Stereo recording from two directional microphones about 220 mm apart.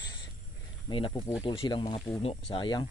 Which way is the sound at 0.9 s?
20° left (ahead or behind).